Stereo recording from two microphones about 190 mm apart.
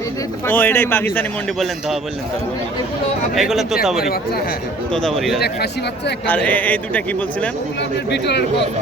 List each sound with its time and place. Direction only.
0.4 s a man's voice: 10° left (ahead or behind)
3.3 s a man's voice: centre (ahead or behind)
7.8 s speech: 65° left (ahead or behind)